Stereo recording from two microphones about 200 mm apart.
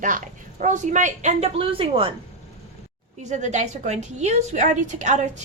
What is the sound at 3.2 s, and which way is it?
A woman's voice, 35° right (ahead or behind).